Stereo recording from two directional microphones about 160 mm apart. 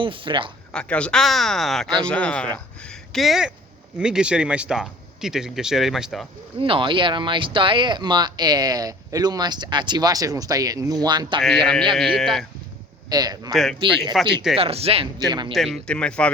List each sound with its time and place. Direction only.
0.0 s speech: 30° right (ahead or behind)
0.7 s speech: 5° left (ahead or behind)
6.6 s speech: 35° right (ahead or behind)
11.3 s speech: 5° left (ahead or behind)
13.1 s speech: 25° right (ahead or behind)
13.5 s speech: centre (ahead or behind)
14.5 s speech: 40° right (ahead or behind)
15.3 s speech: 25° right (ahead or behind)
15.5 s speech: centre (ahead or behind)